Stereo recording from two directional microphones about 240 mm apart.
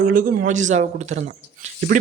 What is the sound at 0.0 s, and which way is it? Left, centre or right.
Speech, right.